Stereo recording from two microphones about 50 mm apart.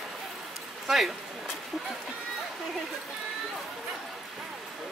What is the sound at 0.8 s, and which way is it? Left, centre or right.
Speech, centre.